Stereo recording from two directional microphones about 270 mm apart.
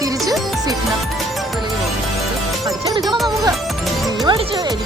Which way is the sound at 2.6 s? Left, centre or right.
Centre.